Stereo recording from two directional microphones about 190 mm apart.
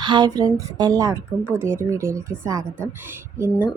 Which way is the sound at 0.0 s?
25° right (ahead or behind).